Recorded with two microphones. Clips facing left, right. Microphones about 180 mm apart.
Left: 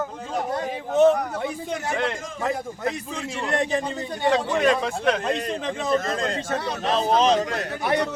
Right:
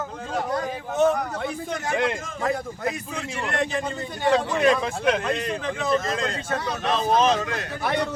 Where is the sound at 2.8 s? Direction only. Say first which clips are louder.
Left 1 dB; 5° right (ahead or behind).